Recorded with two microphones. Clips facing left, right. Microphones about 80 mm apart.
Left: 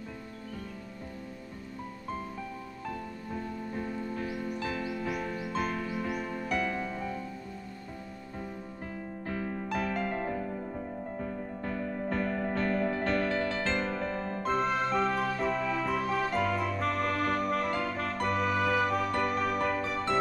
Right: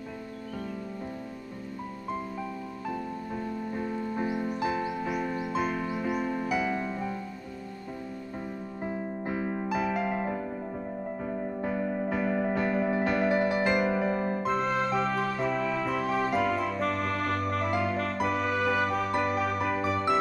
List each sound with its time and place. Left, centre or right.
3.7 s music: centre
4.1 s music: right
8.4 s music: centre
9.7 s music: centre
14.4 s music: centre